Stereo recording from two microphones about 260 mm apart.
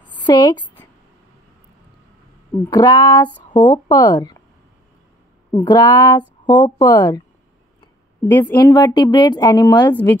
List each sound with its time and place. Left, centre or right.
0.2 s a woman's voice: centre
2.5 s speech: centre
5.5 s speech: centre